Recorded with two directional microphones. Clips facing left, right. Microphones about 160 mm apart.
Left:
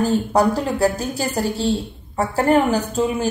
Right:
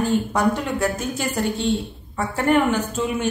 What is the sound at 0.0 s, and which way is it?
Speech, 35° left (ahead or behind).